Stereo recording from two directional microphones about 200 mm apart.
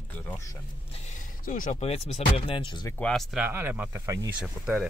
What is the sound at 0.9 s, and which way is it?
Speech, 35° left (ahead or behind).